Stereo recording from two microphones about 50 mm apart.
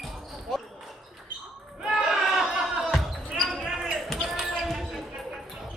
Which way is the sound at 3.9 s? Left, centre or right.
Centre.